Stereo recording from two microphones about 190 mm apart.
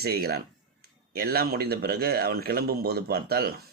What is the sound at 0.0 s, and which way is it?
Speech, 55° right (ahead or behind).